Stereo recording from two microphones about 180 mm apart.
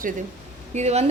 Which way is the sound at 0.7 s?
35° right (ahead or behind).